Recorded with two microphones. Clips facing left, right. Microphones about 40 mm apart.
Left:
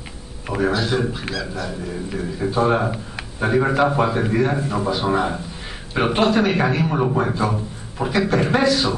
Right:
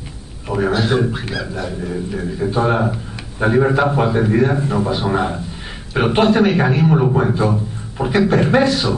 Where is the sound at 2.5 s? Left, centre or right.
Centre.